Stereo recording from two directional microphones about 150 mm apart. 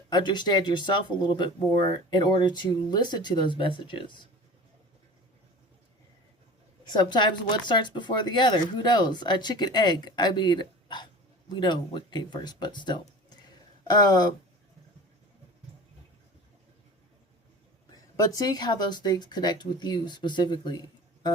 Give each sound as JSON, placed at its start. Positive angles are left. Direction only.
{"t": 0.1, "sound": "speech", "side_deg": 30}
{"t": 6.8, "sound": "speech", "side_deg": 30}
{"t": 17.9, "sound": "speech", "side_deg": 25}